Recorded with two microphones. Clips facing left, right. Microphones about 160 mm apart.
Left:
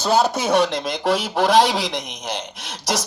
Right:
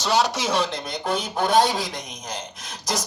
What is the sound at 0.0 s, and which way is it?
Speech, 50° left (ahead or behind).